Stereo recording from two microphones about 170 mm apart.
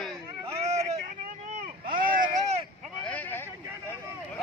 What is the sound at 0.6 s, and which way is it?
Vehicle, 40° right (ahead or behind).